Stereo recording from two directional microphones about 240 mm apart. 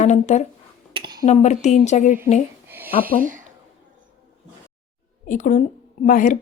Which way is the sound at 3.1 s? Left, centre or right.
Right.